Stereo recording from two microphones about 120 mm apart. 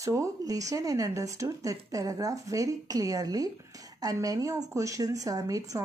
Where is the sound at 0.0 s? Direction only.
25° right (ahead or behind).